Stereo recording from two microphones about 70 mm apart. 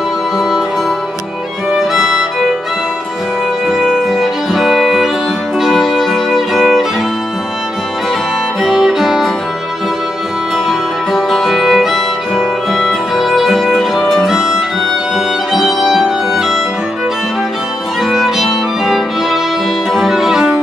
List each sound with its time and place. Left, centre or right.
2.0 s music: centre
3.6 s music: centre
8.6 s music: centre
10.7 s music: centre
18.0 s violin: centre
19.9 s music: centre